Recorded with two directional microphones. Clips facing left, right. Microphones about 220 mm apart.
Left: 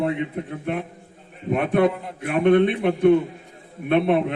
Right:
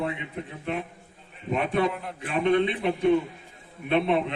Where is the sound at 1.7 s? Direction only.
55° left (ahead or behind).